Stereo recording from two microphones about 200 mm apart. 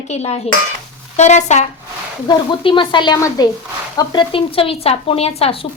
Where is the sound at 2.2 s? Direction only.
20° left (ahead or behind).